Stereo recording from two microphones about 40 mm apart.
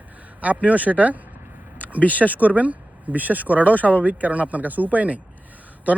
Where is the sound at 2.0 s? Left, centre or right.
Left.